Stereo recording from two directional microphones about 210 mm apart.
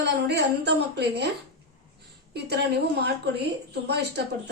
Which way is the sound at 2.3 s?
50° right (ahead or behind).